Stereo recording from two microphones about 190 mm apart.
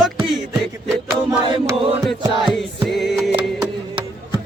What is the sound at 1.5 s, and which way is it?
Chant, 25° right (ahead or behind).